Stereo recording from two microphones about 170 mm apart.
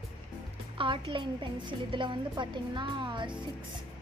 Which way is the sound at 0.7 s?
30° right (ahead or behind).